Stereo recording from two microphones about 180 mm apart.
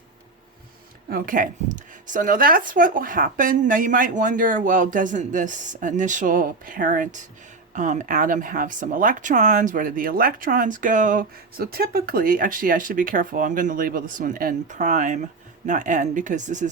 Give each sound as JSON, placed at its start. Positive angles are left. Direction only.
{"t": 1.1, "sound": "speech", "side_deg": -50}